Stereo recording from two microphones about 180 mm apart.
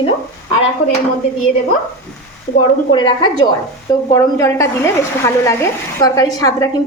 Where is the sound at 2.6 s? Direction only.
25° left (ahead or behind).